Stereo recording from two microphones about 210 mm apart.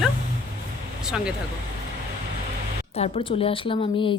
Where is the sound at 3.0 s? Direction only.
30° left (ahead or behind).